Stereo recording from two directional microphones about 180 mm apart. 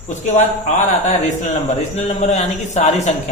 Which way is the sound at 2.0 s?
40° left (ahead or behind).